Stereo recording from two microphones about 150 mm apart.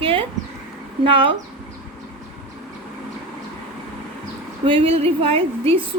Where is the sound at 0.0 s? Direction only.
35° right (ahead or behind).